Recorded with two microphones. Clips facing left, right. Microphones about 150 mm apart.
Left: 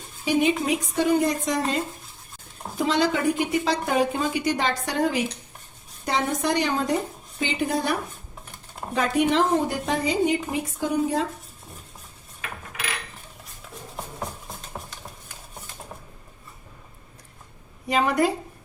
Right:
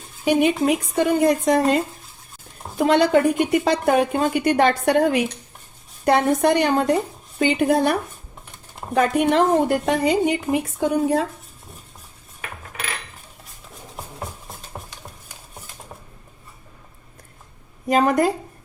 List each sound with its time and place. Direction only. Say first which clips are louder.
0.3 s a woman's voice: right 4 dB; 60° right (ahead or behind)
17.8 s speech: right 4 dB; 45° right (ahead or behind)